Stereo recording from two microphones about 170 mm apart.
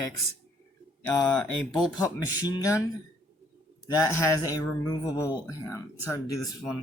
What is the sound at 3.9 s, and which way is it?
Speech, 15° left (ahead or behind).